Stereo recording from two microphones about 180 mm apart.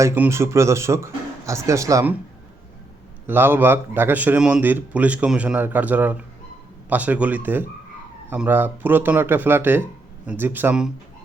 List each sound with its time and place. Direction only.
0.0 s a man's voice: 15° right (ahead or behind)
3.2 s a man's voice: 10° right (ahead or behind)